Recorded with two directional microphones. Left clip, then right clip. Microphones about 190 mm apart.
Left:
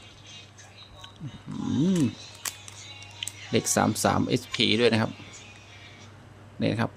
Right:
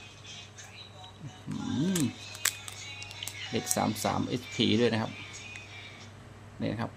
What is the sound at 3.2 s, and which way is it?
Speech, 35° left (ahead or behind).